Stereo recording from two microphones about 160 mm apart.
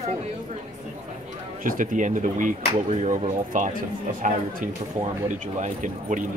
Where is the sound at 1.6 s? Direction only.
55° right (ahead or behind).